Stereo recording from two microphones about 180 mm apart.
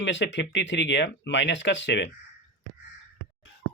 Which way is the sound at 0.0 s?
85° left.